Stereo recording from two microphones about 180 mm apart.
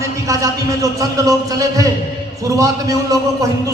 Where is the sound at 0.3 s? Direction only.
20° right (ahead or behind).